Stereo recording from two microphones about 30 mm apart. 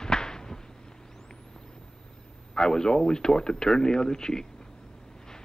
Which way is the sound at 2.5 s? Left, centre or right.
Left.